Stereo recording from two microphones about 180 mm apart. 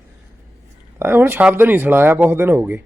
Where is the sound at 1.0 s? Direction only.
10° right (ahead or behind).